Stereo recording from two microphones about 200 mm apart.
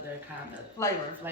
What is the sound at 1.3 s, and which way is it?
Speech, 10° right (ahead or behind).